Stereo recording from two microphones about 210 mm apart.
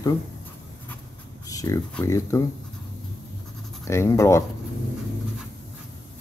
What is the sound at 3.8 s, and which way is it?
Speech, 15° left (ahead or behind).